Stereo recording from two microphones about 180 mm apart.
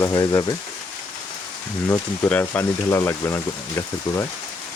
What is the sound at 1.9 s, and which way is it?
Speech, 10° left (ahead or behind).